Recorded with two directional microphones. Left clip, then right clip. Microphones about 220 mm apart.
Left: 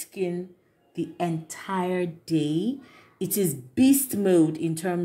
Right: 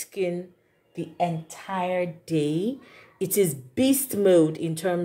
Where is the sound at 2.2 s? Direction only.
5° right (ahead or behind).